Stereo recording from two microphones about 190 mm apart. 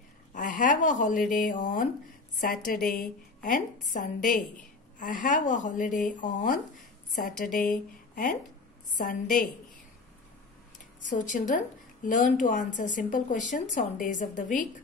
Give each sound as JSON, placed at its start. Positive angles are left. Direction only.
{"t": 0.3, "sound": "a woman's voice", "side_deg": 45}
{"t": 11.0, "sound": "a woman's voice", "side_deg": 40}